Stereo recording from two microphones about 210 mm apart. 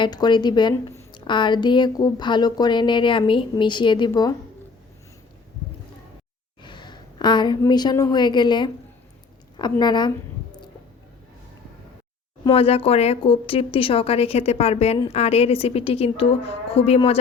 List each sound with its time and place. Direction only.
0.0 s a woman's voice: 20° left (ahead or behind)
6.6 s a woman's voice: 20° left (ahead or behind)
12.5 s a woman's voice: 25° left (ahead or behind)